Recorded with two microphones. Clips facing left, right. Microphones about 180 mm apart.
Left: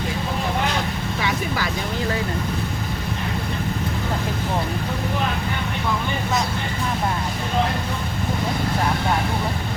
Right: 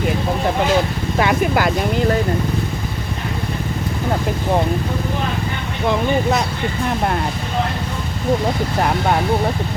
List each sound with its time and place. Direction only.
1.2 s speech: 65° right (ahead or behind)